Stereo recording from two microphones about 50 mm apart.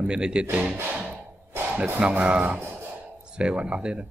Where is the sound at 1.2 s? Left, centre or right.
Right.